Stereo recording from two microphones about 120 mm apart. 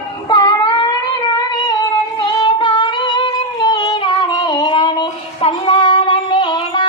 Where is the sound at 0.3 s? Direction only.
35° left (ahead or behind).